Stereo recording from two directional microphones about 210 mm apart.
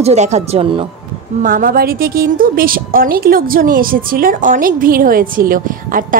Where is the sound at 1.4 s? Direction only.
40° right (ahead or behind).